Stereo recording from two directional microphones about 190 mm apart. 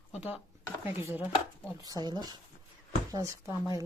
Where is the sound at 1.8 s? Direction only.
20° right (ahead or behind).